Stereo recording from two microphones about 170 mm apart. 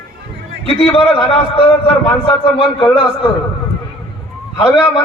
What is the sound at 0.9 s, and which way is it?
A man's voice, 35° left (ahead or behind).